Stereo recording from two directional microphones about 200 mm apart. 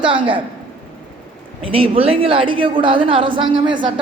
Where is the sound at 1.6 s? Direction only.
30° right (ahead or behind).